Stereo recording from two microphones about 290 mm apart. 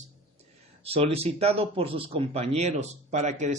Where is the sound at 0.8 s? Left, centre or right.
Centre.